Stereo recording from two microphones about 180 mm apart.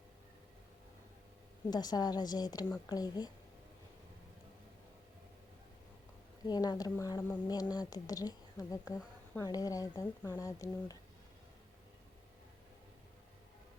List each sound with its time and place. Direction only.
1.7 s a woman's voice: 20° left (ahead or behind)
6.4 s a woman's voice: 20° left (ahead or behind)